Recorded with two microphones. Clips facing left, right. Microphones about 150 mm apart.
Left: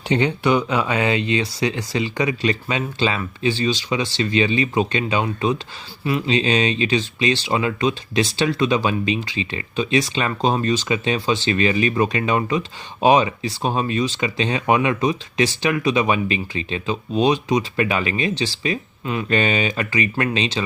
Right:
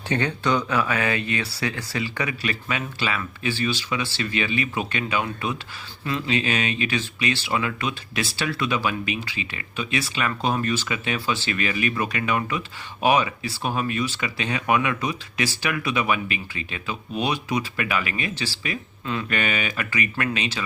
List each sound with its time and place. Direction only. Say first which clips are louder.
0.1 s speech: left 5 dB; 15° left (ahead or behind)